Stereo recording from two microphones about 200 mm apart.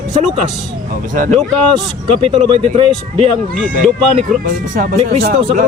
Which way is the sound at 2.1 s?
25° right (ahead or behind).